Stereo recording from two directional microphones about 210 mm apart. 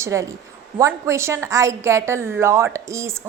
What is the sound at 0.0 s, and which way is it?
A woman's voice, 15° right (ahead or behind).